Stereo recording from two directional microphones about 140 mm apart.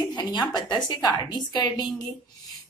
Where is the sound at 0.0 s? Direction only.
30° left (ahead or behind).